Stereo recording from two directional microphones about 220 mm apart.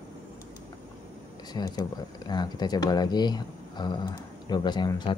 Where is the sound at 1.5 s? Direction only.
15° left (ahead or behind).